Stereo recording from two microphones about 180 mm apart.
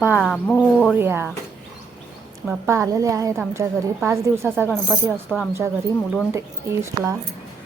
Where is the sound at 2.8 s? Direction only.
20° right (ahead or behind).